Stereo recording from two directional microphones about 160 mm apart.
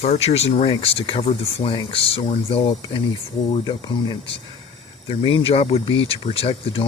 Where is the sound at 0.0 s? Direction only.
40° left (ahead or behind).